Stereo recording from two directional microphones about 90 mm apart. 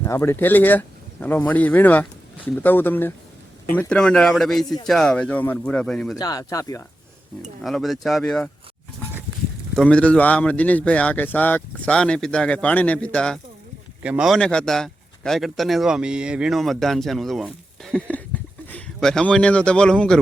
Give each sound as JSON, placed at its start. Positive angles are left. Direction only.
{"t": 0.0, "sound": "speech", "side_deg": 30}
{"t": 3.8, "sound": "a man's voice", "side_deg": 10}
{"t": 6.1, "sound": "speech", "side_deg": 45}
{"t": 7.6, "sound": "a man's voice", "side_deg": 0}
{"t": 9.7, "sound": "a man's voice", "side_deg": 10}
{"t": 14.0, "sound": "speech", "side_deg": -15}
{"t": 14.3, "sound": "a man's voice", "side_deg": 5}
{"t": 18.1, "sound": "a man's voice", "side_deg": 15}